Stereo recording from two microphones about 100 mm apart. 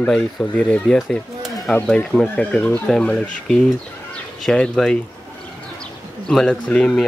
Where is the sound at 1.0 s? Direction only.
Centre (ahead or behind).